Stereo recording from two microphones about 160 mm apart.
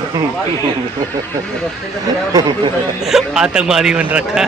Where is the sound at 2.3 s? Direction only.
25° right (ahead or behind).